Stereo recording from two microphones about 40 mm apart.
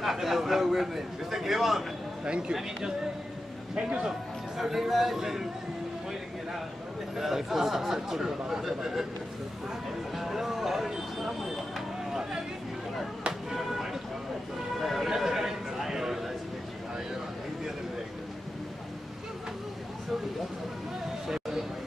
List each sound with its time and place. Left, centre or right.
0.0 s a man's voice: centre
2.2 s a man's voice: right
3.7 s a man's voice: right
4.6 s speech: centre
7.2 s speech: centre
10.1 s speech: centre
12.1 s vehicle: centre
13.5 s music: centre
14.8 s a sound: centre
21.3 s a sound: centre